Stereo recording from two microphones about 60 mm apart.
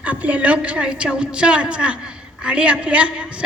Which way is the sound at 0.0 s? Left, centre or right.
Right.